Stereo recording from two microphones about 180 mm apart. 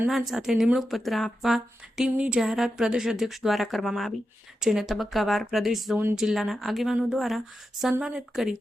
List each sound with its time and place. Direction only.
0.1 s speech: centre (ahead or behind)